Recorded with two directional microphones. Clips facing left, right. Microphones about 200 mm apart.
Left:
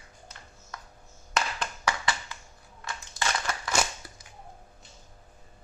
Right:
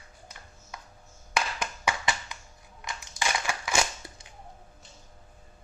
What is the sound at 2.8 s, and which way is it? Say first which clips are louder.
Crushing: even; 15° right (ahead or behind).